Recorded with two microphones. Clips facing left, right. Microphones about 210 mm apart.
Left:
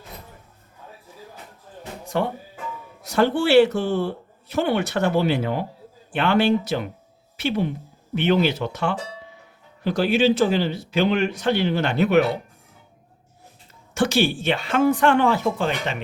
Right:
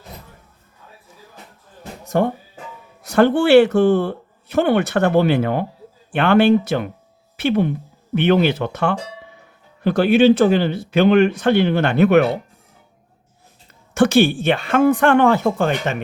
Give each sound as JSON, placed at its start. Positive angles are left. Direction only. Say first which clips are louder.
{"t": 2.0, "sound": "speech", "louder": "right 6 dB", "side_deg": -50}
{"t": 13.9, "sound": "speech", "louder": "right 6 dB", "side_deg": -55}